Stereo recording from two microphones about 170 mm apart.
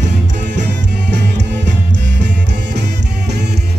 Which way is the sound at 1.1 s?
90° right.